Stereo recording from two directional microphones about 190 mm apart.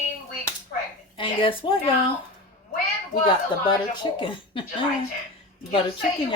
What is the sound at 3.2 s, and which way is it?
Speech, 25° left (ahead or behind).